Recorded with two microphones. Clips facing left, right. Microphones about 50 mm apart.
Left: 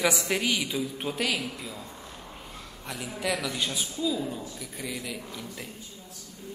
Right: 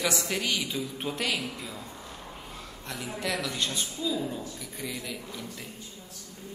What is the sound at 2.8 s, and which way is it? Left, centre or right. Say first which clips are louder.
A woman's voice: left 2 dB; centre.